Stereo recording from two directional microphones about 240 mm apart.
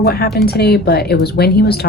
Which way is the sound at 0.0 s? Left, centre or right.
Left.